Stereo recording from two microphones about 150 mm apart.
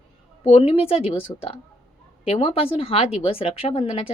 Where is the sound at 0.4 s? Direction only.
40° left (ahead or behind).